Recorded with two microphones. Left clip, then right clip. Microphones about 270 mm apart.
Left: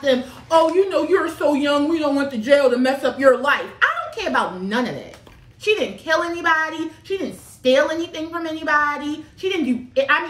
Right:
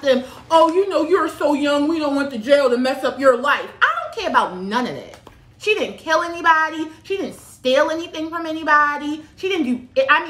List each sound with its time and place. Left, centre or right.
0.0 s a woman's voice: centre